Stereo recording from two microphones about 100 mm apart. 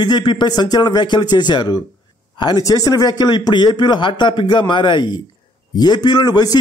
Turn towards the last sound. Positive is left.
turn(degrees=45)  # may be behind; listen again after turning